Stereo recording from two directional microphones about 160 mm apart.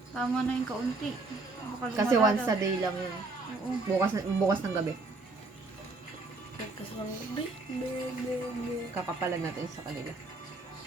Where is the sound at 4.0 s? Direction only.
20° right (ahead or behind).